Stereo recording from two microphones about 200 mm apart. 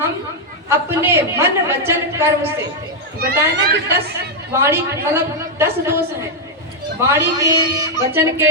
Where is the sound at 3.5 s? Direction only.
60° right (ahead or behind).